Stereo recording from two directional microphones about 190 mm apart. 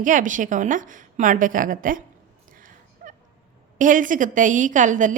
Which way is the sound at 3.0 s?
45° right (ahead or behind).